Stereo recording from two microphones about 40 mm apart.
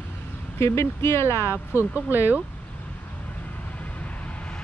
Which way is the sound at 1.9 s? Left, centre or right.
Right.